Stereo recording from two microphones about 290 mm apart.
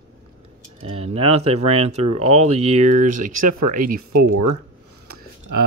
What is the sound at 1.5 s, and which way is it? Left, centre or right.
Speech, right.